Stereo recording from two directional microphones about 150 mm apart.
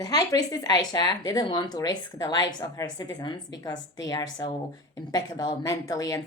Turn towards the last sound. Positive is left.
turn(degrees=25)  # may be behind; listen again after turning